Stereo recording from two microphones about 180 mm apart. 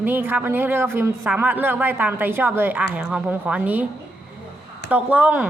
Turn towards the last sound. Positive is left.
turn(degrees=-5)  # may be behind; listen again after turning